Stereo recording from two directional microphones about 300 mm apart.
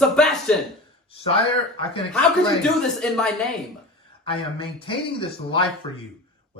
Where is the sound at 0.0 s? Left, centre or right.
Centre.